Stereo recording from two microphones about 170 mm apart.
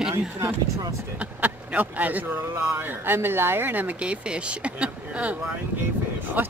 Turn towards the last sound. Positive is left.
turn(degrees=-10)  # may be behind; listen again after turning